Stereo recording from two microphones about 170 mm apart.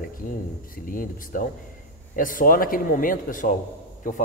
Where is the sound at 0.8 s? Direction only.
55° left (ahead or behind).